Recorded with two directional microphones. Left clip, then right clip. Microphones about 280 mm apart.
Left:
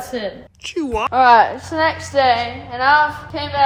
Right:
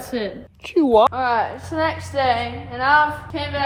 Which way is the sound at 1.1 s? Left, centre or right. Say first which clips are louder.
Left 9 dB; left.